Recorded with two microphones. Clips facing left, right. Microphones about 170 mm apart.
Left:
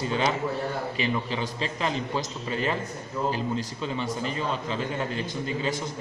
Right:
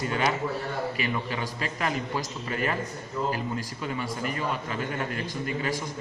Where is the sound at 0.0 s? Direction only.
25° left (ahead or behind).